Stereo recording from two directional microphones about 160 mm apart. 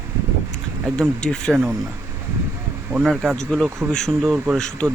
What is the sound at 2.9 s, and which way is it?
Speech, 5° right (ahead or behind).